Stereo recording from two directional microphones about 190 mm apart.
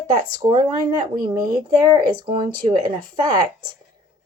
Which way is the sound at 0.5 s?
20° right (ahead or behind).